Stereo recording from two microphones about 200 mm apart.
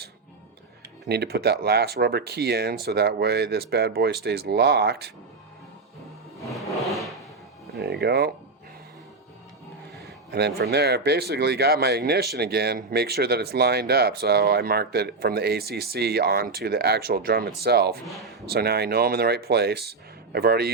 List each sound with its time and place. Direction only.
1.0 s speech: 55° right (ahead or behind)
6.5 s a sound: centre (ahead or behind)
7.8 s speech: 55° right (ahead or behind)
10.0 s speech: 55° right (ahead or behind)